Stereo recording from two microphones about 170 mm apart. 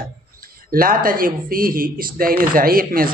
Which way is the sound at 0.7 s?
55° right (ahead or behind).